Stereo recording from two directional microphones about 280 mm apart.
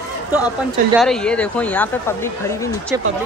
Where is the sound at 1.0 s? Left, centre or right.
Centre.